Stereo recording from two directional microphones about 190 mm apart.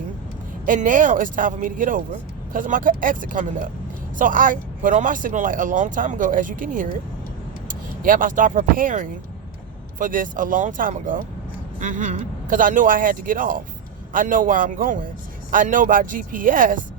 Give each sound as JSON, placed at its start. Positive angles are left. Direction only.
{"t": 0.6, "sound": "speech", "side_deg": -45}